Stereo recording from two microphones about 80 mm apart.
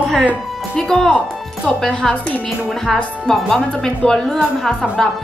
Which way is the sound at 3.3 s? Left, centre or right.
Centre.